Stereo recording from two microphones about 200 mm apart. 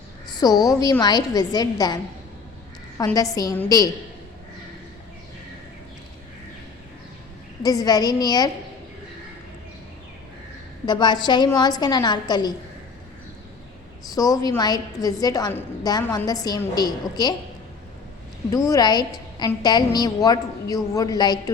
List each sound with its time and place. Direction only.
0.3 s a woman's voice: 20° left (ahead or behind)
3.2 s a woman's voice: 20° left (ahead or behind)
7.6 s a woman's voice: 20° left (ahead or behind)
10.8 s a woman's voice: 20° left (ahead or behind)
14.2 s a woman's voice: 20° left (ahead or behind)
18.5 s a woman's voice: 15° left (ahead or behind)